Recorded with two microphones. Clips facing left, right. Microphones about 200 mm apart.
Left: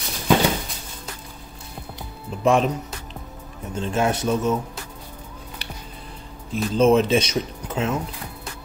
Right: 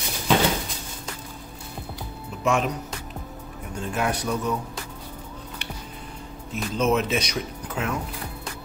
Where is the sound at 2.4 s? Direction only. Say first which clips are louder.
Left 5 dB; 30° left (ahead or behind).